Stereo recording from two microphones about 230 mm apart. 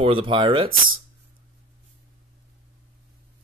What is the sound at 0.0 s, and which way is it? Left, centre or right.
Speech, right.